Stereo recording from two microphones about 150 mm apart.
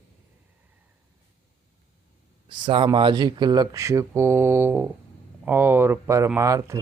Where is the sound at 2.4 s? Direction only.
30° right (ahead or behind).